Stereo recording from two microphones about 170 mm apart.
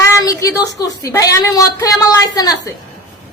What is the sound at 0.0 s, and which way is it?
A woman's voice, 20° left (ahead or behind).